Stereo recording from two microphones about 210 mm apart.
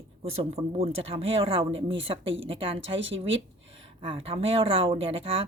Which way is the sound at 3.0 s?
65° right (ahead or behind).